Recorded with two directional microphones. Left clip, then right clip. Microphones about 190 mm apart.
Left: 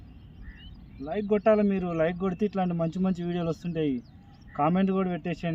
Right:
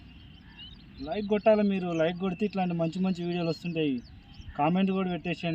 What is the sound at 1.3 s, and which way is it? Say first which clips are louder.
Speech: left 1 dB; centre (ahead or behind).